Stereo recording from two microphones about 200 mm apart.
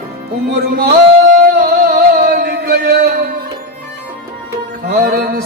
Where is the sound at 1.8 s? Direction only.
50° right (ahead or behind).